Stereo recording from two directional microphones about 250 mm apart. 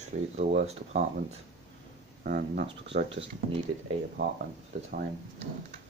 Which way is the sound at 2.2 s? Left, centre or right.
Right.